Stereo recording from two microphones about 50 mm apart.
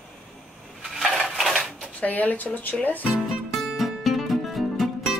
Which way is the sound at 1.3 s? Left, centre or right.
Centre.